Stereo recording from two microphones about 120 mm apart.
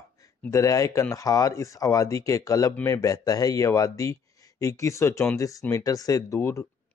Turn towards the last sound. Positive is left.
turn(degrees=25)  # may be behind; listen again after turning